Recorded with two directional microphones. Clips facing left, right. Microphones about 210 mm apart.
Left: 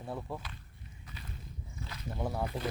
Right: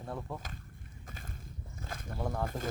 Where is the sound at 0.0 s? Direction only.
5° left (ahead or behind).